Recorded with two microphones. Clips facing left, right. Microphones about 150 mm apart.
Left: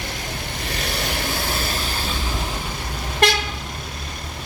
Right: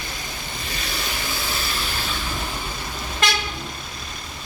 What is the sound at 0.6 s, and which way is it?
Vehicle, 65° left (ahead or behind).